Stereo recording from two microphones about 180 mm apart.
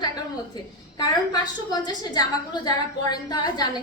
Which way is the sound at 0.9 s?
20° left (ahead or behind).